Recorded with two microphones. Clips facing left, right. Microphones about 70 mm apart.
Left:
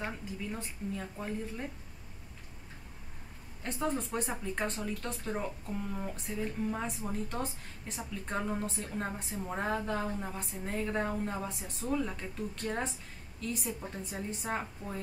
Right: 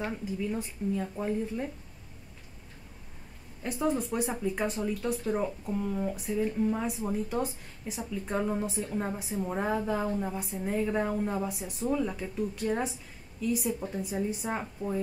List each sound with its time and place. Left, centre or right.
0.6 s a woman's voice: centre
3.6 s a woman's voice: centre